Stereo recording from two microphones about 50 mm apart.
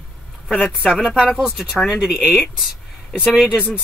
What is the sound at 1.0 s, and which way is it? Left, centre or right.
Speech, centre.